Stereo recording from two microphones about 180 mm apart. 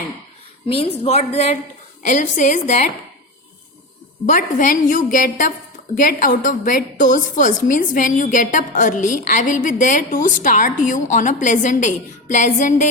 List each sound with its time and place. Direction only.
0.7 s a woman's voice: 35° left (ahead or behind)
4.3 s a woman's voice: 45° left (ahead or behind)